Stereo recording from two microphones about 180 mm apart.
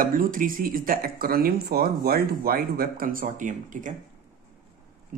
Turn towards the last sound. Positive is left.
turn(degrees=-45)  # may be behind; listen again after turning